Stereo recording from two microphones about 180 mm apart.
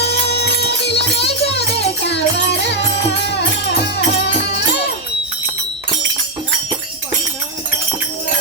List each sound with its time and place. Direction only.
0.0 s music: 65° left (ahead or behind)
1.2 s music: 35° left (ahead or behind)
2.0 s music: 70° left (ahead or behind)